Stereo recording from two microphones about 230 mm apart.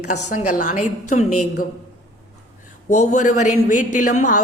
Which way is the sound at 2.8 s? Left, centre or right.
Left.